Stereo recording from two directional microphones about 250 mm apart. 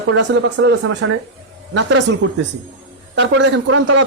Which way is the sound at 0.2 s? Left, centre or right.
Right.